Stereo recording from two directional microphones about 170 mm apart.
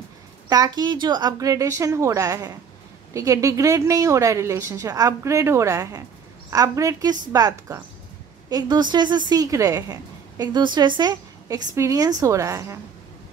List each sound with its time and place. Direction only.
0.5 s a woman's voice: 25° right (ahead or behind)